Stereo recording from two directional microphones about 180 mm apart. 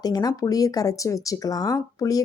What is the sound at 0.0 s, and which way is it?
A woman's voice, 20° left (ahead or behind).